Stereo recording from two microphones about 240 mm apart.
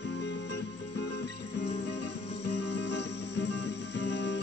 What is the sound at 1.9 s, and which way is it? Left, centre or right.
Music, left.